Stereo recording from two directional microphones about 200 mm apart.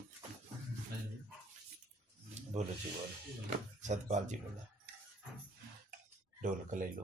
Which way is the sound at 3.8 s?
35° right (ahead or behind).